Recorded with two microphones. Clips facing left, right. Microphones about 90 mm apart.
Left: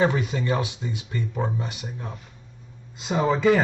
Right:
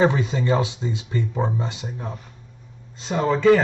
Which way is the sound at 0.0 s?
25° right (ahead or behind).